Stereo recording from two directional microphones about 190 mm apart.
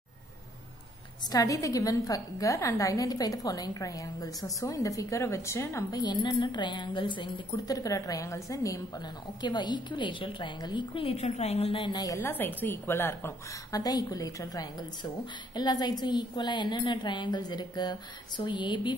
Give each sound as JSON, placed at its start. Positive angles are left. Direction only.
{"t": 1.3, "sound": "a woman's voice", "side_deg": 15}